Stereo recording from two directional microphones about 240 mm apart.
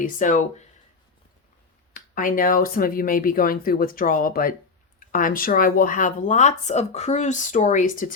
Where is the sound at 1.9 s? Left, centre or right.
Left.